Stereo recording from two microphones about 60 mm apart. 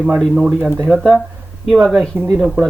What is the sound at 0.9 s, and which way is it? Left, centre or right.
Speech, centre.